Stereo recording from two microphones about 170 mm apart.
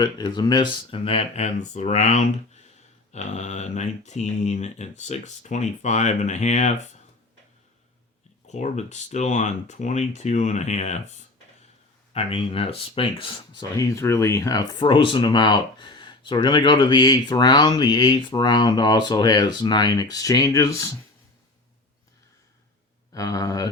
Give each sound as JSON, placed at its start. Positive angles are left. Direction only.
{"t": 0.0, "sound": "speech", "side_deg": 25}
{"t": 8.4, "sound": "speech", "side_deg": 45}
{"t": 12.1, "sound": "speech", "side_deg": 35}
{"t": 23.1, "sound": "speech", "side_deg": 20}